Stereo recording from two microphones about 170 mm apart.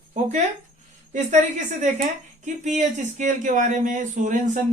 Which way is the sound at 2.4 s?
45° right (ahead or behind).